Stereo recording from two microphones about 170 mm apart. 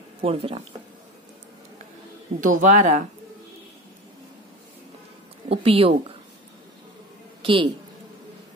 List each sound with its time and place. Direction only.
0.2 s speech: 35° right (ahead or behind)
2.4 s speech: 50° right (ahead or behind)
5.5 s speech: 35° right (ahead or behind)
7.4 s speech: 30° right (ahead or behind)